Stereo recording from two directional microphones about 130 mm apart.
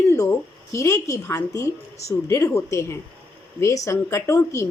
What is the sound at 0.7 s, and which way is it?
A woman's voice, 25° left (ahead or behind).